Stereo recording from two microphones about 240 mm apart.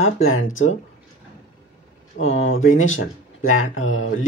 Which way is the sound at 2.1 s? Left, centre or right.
Left.